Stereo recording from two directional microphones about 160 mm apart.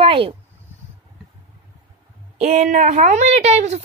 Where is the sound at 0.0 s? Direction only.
35° right (ahead or behind).